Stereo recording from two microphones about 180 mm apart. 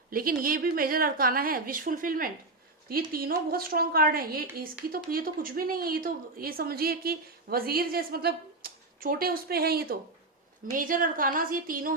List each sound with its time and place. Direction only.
0.1 s a woman's voice: 55° right (ahead or behind)